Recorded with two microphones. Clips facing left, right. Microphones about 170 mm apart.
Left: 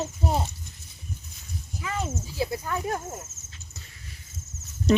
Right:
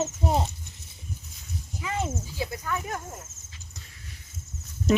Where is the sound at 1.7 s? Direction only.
20° right (ahead or behind).